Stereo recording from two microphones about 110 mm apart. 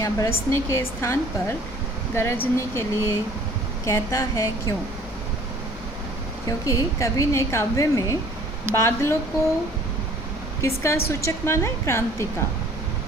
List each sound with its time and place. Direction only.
0.0 s speech: 25° left (ahead or behind)
6.7 s speech: 30° left (ahead or behind)
10.6 s speech: 25° left (ahead or behind)